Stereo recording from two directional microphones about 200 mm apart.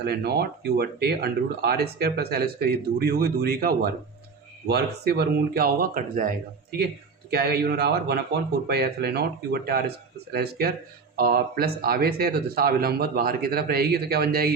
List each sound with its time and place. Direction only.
0.0 s speech: 50° right (ahead or behind)